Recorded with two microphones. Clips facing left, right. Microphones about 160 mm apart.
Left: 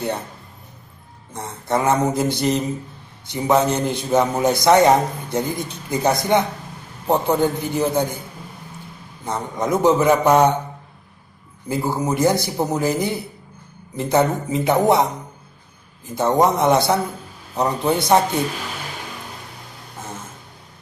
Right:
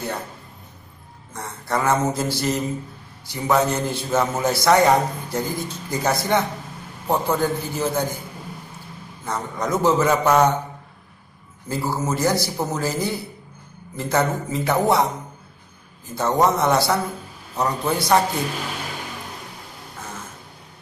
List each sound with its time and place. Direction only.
1.3 s speech: 20° left (ahead or behind)
9.2 s a man's voice: 20° left (ahead or behind)
11.6 s speech: 20° left (ahead or behind)
16.2 s speech: 20° left (ahead or behind)